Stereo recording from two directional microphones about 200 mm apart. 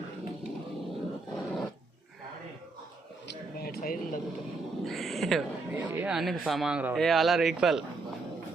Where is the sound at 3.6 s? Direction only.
50° left (ahead or behind).